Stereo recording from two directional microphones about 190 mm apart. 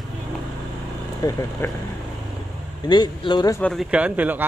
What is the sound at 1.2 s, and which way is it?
Speech, 20° left (ahead or behind).